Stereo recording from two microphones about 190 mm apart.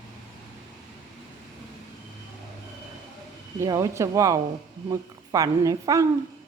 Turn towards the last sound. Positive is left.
turn(degrees=-20)  # may be behind; listen again after turning